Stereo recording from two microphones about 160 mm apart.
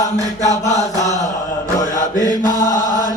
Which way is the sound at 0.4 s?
45° left (ahead or behind).